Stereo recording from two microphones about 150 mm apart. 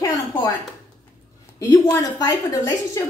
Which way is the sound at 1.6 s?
20° left (ahead or behind).